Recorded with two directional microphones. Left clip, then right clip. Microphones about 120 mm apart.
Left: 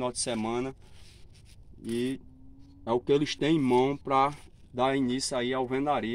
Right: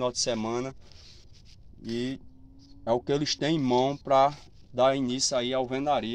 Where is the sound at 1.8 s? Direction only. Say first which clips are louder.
Left 1 dB; 40° right (ahead or behind).